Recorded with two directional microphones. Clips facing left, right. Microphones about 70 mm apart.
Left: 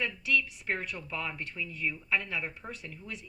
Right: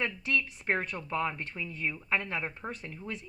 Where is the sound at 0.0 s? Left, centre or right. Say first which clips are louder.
Even; right.